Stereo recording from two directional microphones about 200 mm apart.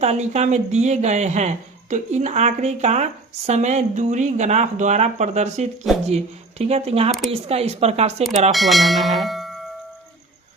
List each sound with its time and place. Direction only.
0.0 s speech: 35° right (ahead or behind)
8.5 s bell: centre (ahead or behind)